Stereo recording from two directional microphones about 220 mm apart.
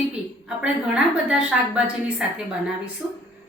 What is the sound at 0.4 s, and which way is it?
A woman's voice, 5° right (ahead or behind).